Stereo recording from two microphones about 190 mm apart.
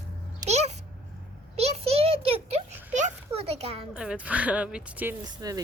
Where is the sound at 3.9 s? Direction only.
5° right (ahead or behind).